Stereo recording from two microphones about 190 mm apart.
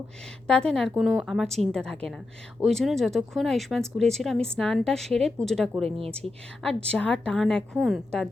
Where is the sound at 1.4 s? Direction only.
35° right (ahead or behind).